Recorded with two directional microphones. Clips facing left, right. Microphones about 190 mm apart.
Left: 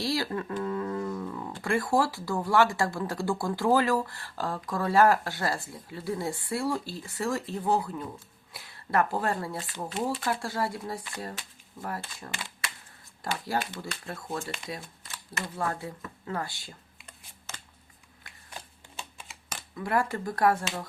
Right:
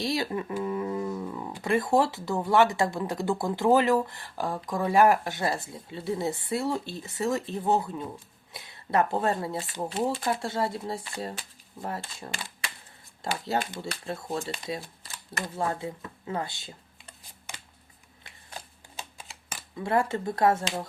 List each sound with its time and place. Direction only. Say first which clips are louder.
0.0 s speech: right 1 dB; 20° right (ahead or behind)
15.6 s speech: right 3 dB; 20° right (ahead or behind)
19.7 s speech: right 2 dB; 25° right (ahead or behind)